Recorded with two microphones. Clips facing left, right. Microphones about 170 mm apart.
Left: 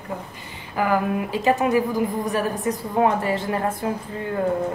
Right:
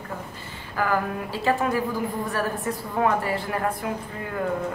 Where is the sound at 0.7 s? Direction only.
15° left (ahead or behind).